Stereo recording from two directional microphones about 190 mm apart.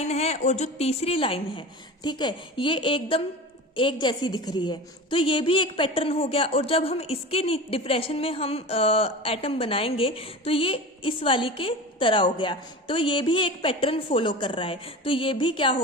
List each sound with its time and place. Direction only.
0.0 s a woman's voice: 35° left (ahead or behind)